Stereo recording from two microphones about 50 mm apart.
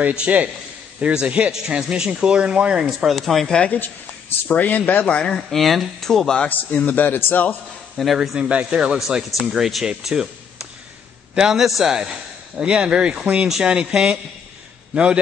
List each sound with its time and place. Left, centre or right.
0.1 s speech: right
3.1 s a man's voice: centre
3.4 s speech: centre
4.5 s speech: left
5.3 s speech: centre
6.3 s a man's voice: left
6.9 s speech: left
8.0 s a man's voice: centre
8.4 s speech: right
11.3 s speech: centre
12.0 s speech: centre